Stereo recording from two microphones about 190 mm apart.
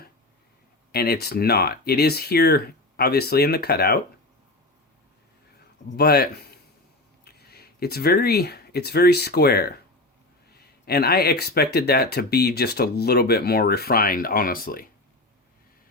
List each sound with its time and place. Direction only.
0.9 s speech: 55° left (ahead or behind)
6.0 s speech: 55° left (ahead or behind)
7.3 s speech: 55° left (ahead or behind)